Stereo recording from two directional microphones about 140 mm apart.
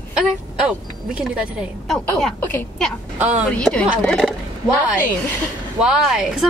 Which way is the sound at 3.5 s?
10° left (ahead or behind).